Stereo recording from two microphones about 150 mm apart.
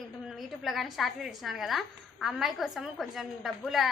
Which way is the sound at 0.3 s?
Centre (ahead or behind).